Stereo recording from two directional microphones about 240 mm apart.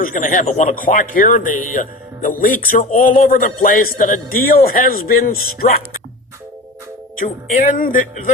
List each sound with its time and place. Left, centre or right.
0.0 s a man's voice: left
5.3 s speech: left
7.2 s a man's voice: left